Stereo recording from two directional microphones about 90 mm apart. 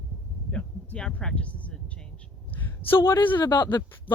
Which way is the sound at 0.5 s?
10° left (ahead or behind).